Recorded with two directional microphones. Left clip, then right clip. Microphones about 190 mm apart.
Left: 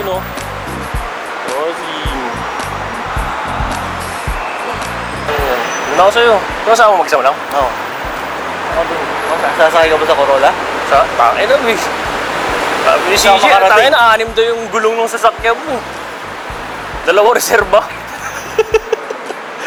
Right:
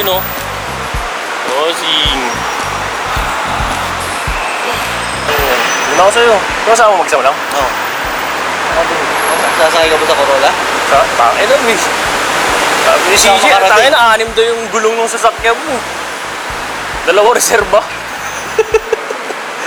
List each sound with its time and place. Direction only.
1.5 s speech: 10° left (ahead or behind)
5.3 s a sound: 10° left (ahead or behind)
7.1 s speech: 15° left (ahead or behind)
8.7 s speech: 15° left (ahead or behind)
17.1 s speech: 10° left (ahead or behind)